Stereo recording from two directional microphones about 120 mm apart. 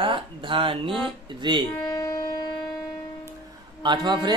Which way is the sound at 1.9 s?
30° left (ahead or behind).